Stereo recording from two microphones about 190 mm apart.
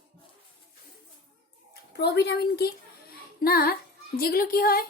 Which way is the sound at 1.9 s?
60° left (ahead or behind).